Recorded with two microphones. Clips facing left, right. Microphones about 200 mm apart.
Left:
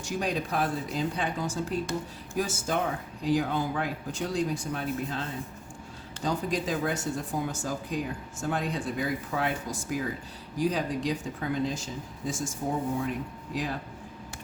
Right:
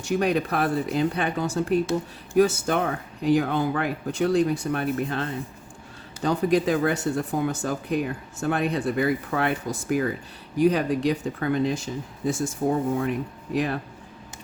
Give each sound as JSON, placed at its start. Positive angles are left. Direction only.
{"t": 0.0, "sound": "speech", "side_deg": -65}